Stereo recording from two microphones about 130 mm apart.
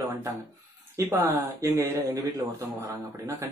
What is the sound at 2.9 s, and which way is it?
Speech, 20° right (ahead or behind).